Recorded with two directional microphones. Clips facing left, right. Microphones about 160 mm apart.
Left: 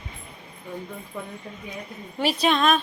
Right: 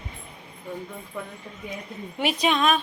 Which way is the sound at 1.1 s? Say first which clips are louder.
Right 1 dB; 5° left (ahead or behind).